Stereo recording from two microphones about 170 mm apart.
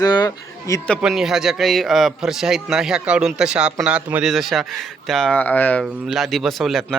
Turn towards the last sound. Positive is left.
turn(degrees=0)  # may be behind; listen again after turning